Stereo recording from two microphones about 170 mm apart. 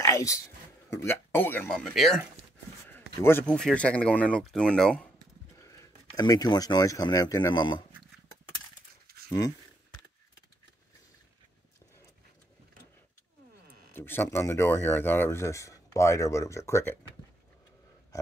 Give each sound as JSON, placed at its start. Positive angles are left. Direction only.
{"t": 0.0, "sound": "a sound", "side_deg": 20}
{"t": 0.8, "sound": "speech", "side_deg": 15}
{"t": 2.9, "sound": "speech", "side_deg": 15}
{"t": 5.6, "sound": "speech", "side_deg": 20}
{"t": 9.0, "sound": "a sound", "side_deg": -65}
{"t": 13.9, "sound": "speech", "side_deg": 15}